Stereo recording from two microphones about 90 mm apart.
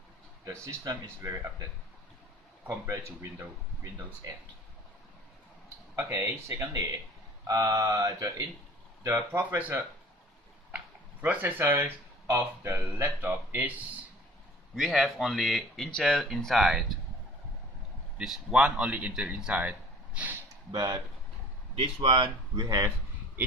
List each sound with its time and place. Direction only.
1.2 s speech: 40° right (ahead or behind)
2.6 s speech: 35° right (ahead or behind)
5.6 s speech: 30° right (ahead or behind)
9.0 s speech: 30° right (ahead or behind)
9.4 s speech: 20° right (ahead or behind)
10.7 s a sound: 15° right (ahead or behind)
11.6 s speech: 25° right (ahead or behind)
14.8 s speech: centre (ahead or behind)
18.2 s speech: 10° right (ahead or behind)
20.7 s speech: 50° right (ahead or behind)
21.8 s speech: 75° right (ahead or behind)
22.5 s speech: 40° right (ahead or behind)